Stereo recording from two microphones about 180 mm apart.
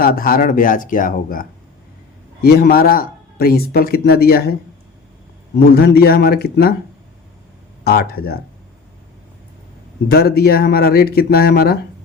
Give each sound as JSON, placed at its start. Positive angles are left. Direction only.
{"t": 0.0, "sound": "a man's voice", "side_deg": 55}
{"t": 5.5, "sound": "a man's voice", "side_deg": 65}
{"t": 7.9, "sound": "a man's voice", "side_deg": 60}
{"t": 10.1, "sound": "a man's voice", "side_deg": 60}